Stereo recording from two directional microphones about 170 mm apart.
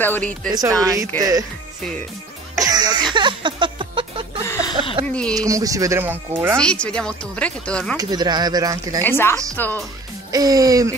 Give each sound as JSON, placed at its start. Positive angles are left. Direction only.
{"t": 0.0, "sound": "speech", "side_deg": 10}
{"t": 0.5, "sound": "speech", "side_deg": -20}
{"t": 2.5, "sound": "music", "side_deg": -20}
{"t": 5.0, "sound": "a sound", "side_deg": 5}
{"t": 5.5, "sound": "speech", "side_deg": -20}
{"t": 6.5, "sound": "speech", "side_deg": 5}
{"t": 8.0, "sound": "speech", "side_deg": -25}
{"t": 9.0, "sound": "speech", "side_deg": 15}
{"t": 10.3, "sound": "speech", "side_deg": -20}